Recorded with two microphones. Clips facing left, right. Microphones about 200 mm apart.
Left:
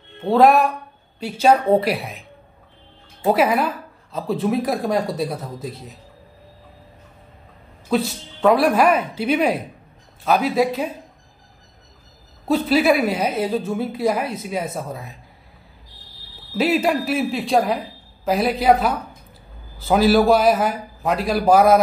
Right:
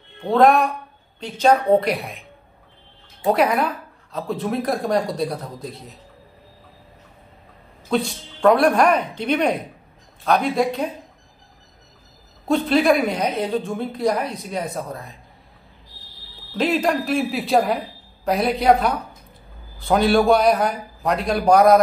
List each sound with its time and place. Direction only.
0.3 s a woman's voice: 5° left (ahead or behind)
3.3 s a woman's voice: 5° left (ahead or behind)
7.9 s a woman's voice: 5° left (ahead or behind)
12.4 s a woman's voice: 5° left (ahead or behind)
16.5 s a woman's voice: 5° left (ahead or behind)